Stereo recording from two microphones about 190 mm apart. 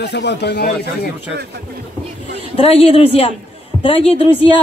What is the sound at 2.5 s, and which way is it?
A man's voice, 30° left (ahead or behind).